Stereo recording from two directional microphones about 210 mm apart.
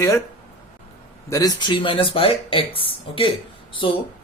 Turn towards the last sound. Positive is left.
turn(degrees=25)  # may be behind; listen again after turning